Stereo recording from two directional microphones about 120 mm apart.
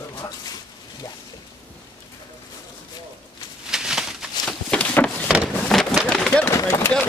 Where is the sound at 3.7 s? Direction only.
5° right (ahead or behind).